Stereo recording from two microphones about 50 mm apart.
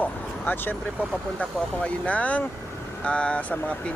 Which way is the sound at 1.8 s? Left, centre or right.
Left.